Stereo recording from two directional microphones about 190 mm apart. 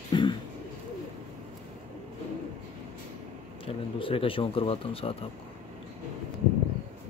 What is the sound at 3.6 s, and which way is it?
Speech, 30° left (ahead or behind).